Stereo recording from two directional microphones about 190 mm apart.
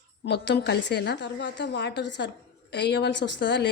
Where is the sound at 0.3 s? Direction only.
65° left (ahead or behind).